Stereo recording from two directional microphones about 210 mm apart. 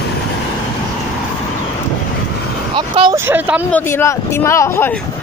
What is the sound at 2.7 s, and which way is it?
Speech, 20° right (ahead or behind).